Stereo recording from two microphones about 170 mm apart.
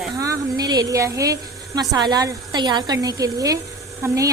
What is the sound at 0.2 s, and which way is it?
A woman's voice, 20° right (ahead or behind).